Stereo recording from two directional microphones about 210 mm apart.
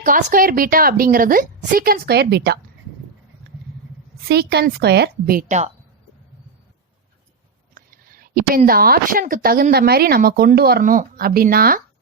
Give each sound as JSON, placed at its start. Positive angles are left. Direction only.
{"t": 0.0, "sound": "a woman's voice", "side_deg": -40}
{"t": 4.3, "sound": "a woman's voice", "side_deg": -50}
{"t": 7.7, "sound": "speech", "side_deg": -40}